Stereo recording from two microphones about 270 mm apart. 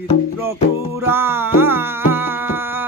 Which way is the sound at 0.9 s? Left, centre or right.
Centre.